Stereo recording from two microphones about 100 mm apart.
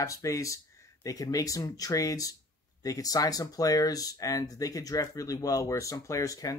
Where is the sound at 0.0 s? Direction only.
35° left (ahead or behind).